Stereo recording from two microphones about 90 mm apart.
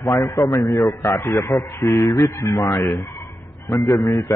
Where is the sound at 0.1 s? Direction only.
45° left (ahead or behind).